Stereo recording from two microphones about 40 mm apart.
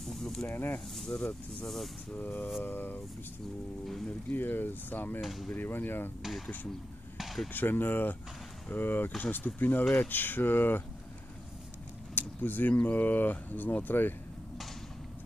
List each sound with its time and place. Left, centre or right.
0.0 s a sound: centre
0.5 s speech: left
0.9 s speech: centre
2.1 s speech: left
3.8 s speech: centre
4.3 s speech: left
5.2 s speech: centre
5.5 s speech: left
7.2 s a sound: centre
7.5 s speech: left
12.2 s speech: left